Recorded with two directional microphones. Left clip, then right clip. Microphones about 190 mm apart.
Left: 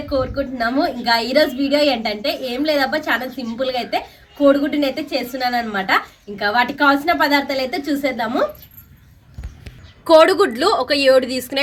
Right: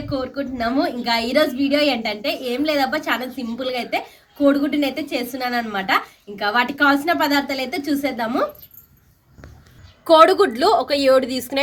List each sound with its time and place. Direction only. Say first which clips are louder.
0.1 s a woman's voice: left 5 dB; 5° right (ahead or behind)
10.0 s a woman's voice: left 1 dB; centre (ahead or behind)